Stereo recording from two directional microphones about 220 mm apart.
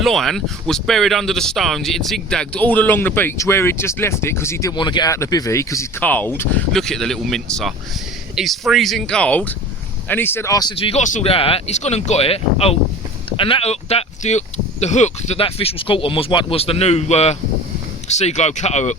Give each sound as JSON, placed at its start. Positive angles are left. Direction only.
{"t": 0.0, "sound": "speech", "side_deg": 0}